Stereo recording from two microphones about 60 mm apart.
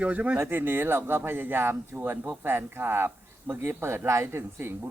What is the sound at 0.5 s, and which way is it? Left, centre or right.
Speech, right.